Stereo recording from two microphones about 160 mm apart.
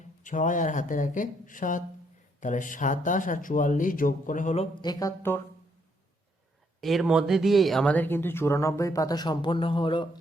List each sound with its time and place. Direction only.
0.2 s speech: 55° left (ahead or behind)
4.8 s speech: 25° left (ahead or behind)
6.8 s speech: centre (ahead or behind); by 10.1 s 30° left (ahead or behind)